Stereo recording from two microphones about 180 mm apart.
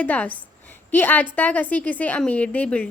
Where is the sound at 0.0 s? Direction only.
10° left (ahead or behind).